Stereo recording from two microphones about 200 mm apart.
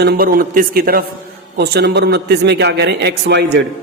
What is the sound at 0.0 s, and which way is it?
A man's voice, 50° right (ahead or behind).